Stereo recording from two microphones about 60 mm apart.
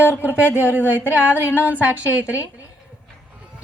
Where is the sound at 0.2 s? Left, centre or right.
Right.